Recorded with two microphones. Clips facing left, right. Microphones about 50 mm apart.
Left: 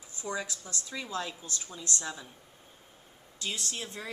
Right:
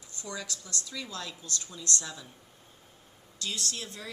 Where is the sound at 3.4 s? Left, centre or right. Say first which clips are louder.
Even; left.